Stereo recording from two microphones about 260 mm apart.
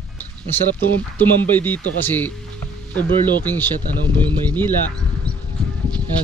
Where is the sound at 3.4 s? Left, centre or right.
Centre.